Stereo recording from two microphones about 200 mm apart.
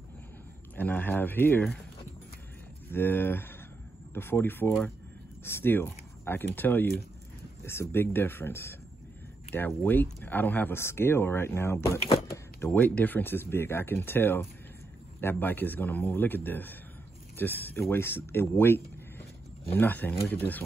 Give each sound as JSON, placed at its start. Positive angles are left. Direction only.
{"t": 0.7, "sound": "speech", "side_deg": 10}
{"t": 2.9, "sound": "speech", "side_deg": 10}